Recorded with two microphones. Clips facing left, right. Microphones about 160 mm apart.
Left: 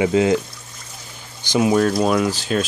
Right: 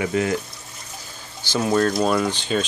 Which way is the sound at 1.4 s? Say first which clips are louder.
Left 3 dB; 10° left (ahead or behind).